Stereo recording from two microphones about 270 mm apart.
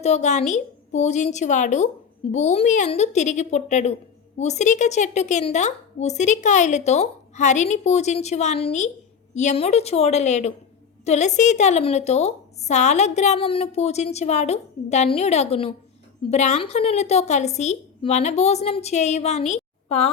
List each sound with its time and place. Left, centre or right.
0.0 s a woman's voice: left